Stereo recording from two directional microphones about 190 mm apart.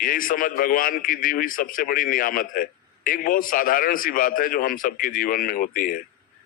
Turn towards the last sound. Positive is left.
turn(degrees=50)  # may be behind; listen again after turning